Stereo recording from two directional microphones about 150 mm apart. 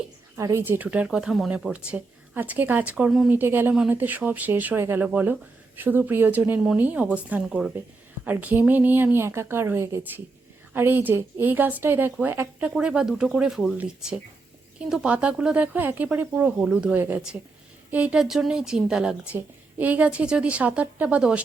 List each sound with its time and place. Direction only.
0.3 s a woman's voice: 20° right (ahead or behind)